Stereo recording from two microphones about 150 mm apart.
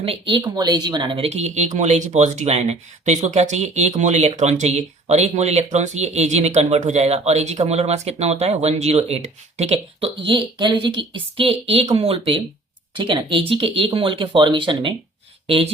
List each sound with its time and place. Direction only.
0.0 s speech: 35° right (ahead or behind)